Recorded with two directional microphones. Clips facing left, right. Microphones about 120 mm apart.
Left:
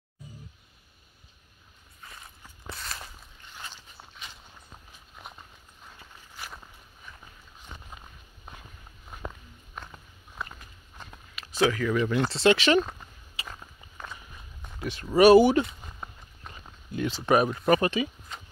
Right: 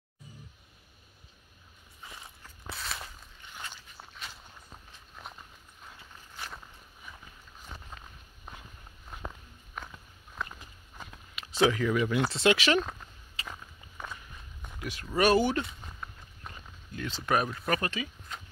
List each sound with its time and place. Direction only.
2.7 s a sound: centre (ahead or behind)
5.1 s walk: 5° left (ahead or behind)
9.8 s walk: 5° left (ahead or behind)
11.3 s a sound: 20° right (ahead or behind)
11.9 s speech: 10° right (ahead or behind)
13.5 s biting: 5° right (ahead or behind)
14.1 s walk: 5° left (ahead or behind)
15.1 s speech: 10° left (ahead or behind)
16.5 s a sound: 5° right (ahead or behind)
16.9 s speech: 15° left (ahead or behind)